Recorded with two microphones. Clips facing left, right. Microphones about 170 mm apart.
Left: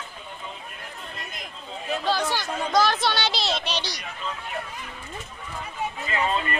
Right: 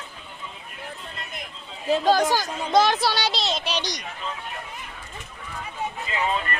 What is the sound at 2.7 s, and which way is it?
Speech, 20° right (ahead or behind).